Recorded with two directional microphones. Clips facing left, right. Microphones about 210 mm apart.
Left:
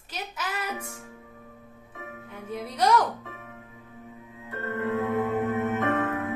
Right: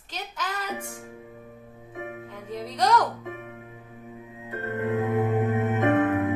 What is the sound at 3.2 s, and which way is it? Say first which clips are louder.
Music: right 6 dB; 15° right (ahead or behind).